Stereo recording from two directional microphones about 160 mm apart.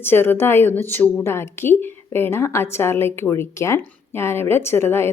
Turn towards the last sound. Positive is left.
turn(degrees=15)  # may be behind; listen again after turning